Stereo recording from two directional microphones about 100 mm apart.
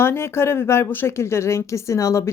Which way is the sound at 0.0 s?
25° left (ahead or behind).